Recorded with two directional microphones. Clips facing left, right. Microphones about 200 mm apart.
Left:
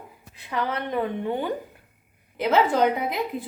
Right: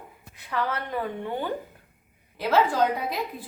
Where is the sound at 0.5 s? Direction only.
20° left (ahead or behind).